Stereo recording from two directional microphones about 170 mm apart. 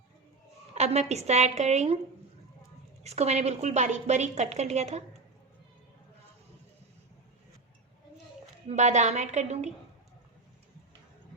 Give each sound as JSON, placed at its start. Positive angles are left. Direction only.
{"t": 0.7, "sound": "a woman's voice", "side_deg": -40}
{"t": 3.0, "sound": "a woman's voice", "side_deg": -40}
{"t": 8.6, "sound": "a woman's voice", "side_deg": -45}